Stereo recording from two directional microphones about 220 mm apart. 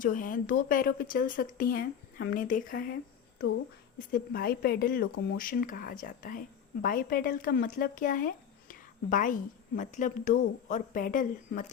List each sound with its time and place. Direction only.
0.0 s speech: 40° left (ahead or behind)
4.1 s speech: 40° left (ahead or behind)